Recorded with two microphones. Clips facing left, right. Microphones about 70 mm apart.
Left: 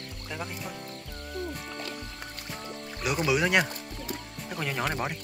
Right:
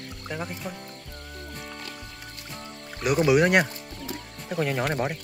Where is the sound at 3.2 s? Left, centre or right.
Right.